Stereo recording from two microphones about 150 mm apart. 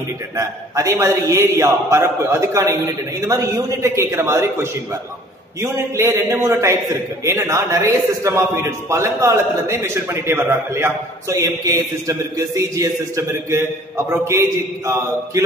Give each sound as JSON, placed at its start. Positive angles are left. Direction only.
{"t": 0.4, "sound": "a man's voice", "side_deg": -20}